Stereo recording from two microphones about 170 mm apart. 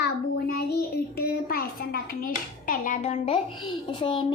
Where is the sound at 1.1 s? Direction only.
65° left (ahead or behind).